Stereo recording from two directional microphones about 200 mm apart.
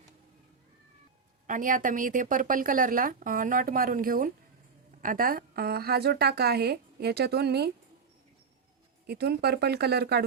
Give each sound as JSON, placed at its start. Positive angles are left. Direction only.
{"t": 1.5, "sound": "speech", "side_deg": -40}
{"t": 9.0, "sound": "speech", "side_deg": -55}